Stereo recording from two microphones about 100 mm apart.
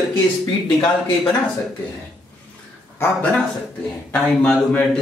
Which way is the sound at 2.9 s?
20° left (ahead or behind).